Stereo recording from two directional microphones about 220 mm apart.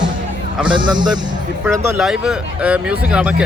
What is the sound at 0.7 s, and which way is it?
Speech, 20° right (ahead or behind).